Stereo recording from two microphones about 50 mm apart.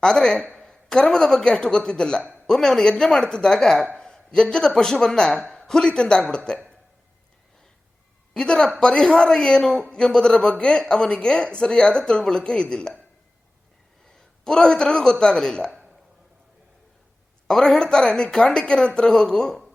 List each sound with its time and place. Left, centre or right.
0.0 s a woman's voice: centre
8.3 s a woman's voice: centre
14.1 s a man's voice: centre
17.5 s a woman's voice: centre